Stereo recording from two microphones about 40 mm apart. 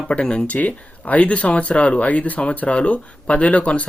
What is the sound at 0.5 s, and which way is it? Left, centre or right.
Speech, left.